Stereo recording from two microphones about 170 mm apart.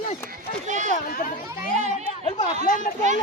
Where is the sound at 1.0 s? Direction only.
55° left (ahead or behind).